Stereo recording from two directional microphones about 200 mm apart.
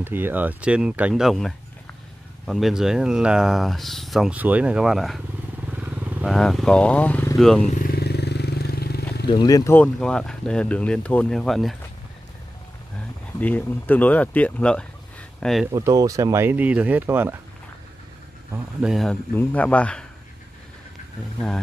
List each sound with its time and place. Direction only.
0.0 s speech: 10° right (ahead or behind)
7.6 s vehicle: 40° left (ahead or behind)
9.3 s speech: 20° left (ahead or behind)
9.9 s speech: 5° left (ahead or behind)
13.4 s speech: 10° left (ahead or behind)
15.7 s speech: 20° right (ahead or behind)
18.5 s speech: 5° right (ahead or behind)